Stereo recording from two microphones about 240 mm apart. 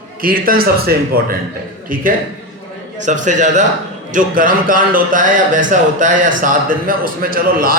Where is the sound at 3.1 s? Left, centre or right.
Right.